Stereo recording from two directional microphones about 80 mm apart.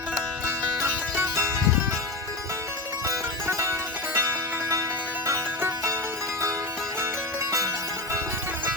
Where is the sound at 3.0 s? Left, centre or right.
Right.